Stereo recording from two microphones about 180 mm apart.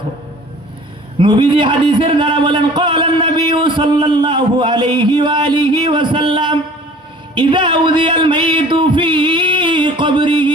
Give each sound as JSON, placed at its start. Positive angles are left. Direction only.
{"t": 1.2, "sound": "a man's voice", "side_deg": -25}